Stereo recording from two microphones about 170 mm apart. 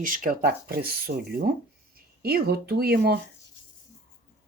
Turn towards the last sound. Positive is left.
turn(degrees=-65)  # may be behind; listen again after turning